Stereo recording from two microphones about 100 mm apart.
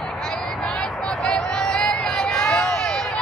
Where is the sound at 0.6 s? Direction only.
5° left (ahead or behind).